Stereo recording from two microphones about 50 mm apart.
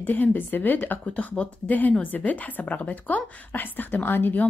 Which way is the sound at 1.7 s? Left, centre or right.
Left.